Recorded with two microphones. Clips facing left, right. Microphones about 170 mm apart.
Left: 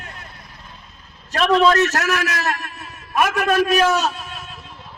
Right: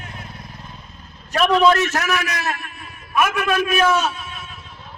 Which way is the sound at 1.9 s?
40° left (ahead or behind).